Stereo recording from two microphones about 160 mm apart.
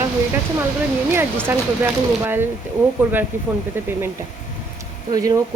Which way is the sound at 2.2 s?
15° right (ahead or behind).